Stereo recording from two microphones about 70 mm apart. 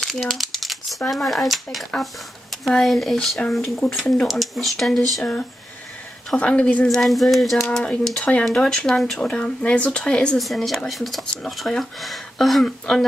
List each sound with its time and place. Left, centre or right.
0.0 s crumpling: centre
1.1 s speech: centre
6.3 s speech: centre
6.9 s speech: centre
7.7 s speech: centre
10.4 s speech: centre